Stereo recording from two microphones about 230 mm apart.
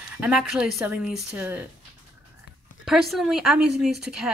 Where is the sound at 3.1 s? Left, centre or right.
Centre.